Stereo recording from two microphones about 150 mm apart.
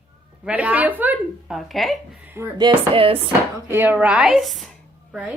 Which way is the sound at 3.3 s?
15° right (ahead or behind).